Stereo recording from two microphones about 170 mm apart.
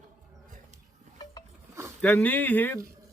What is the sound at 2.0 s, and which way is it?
Speech, 10° left (ahead or behind).